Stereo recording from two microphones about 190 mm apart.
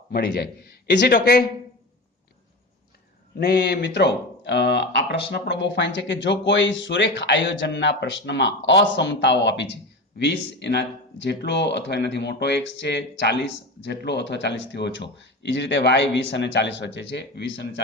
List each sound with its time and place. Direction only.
0.1 s speech: 60° left (ahead or behind)
3.3 s speech: 60° left (ahead or behind)